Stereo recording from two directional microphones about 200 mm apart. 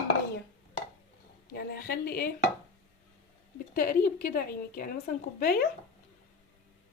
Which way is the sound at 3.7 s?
45° left (ahead or behind).